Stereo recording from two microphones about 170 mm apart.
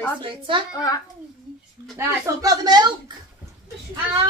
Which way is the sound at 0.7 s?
20° left (ahead or behind).